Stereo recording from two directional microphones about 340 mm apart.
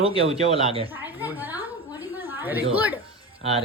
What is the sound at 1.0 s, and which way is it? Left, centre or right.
Speech, centre.